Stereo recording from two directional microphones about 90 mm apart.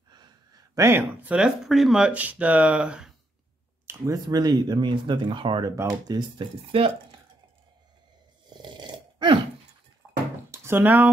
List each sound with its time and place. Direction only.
0.7 s speech: 25° right (ahead or behind)
1.3 s speech: 5° right (ahead or behind)
2.0 s speech: 15° right (ahead or behind)
3.8 s speech: 40° right (ahead or behind); by 5.6 s 70° right (ahead or behind)
5.8 s speech: 40° right (ahead or behind)
6.4 s speech: 65° right (ahead or behind)
8.9 s burping: 65° right (ahead or behind)
10.0 s a sound: 10° left (ahead or behind)
10.5 s a sound: 25° right (ahead or behind)